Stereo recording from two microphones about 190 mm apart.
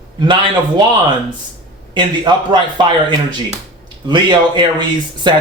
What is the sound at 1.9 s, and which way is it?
Speech, 25° right (ahead or behind).